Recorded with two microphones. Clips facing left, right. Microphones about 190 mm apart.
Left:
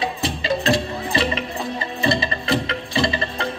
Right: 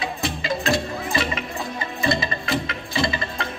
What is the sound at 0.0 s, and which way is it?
Music, 35° left (ahead or behind).